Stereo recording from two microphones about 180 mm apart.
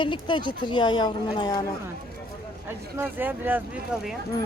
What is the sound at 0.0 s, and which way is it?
A woman's voice, 25° left (ahead or behind).